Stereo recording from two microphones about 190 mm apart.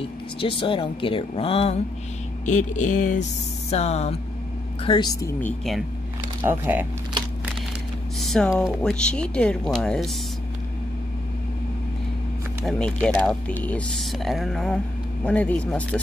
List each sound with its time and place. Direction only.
0.4 s speech: 25° left (ahead or behind)
4.8 s speech: 25° left (ahead or behind)
5.4 s speech: centre (ahead or behind)
6.4 s speech: 10° right (ahead or behind)
8.2 s a sound: centre (ahead or behind)
8.5 s speech: 5° left (ahead or behind)
12.6 s speech: 5° left (ahead or behind)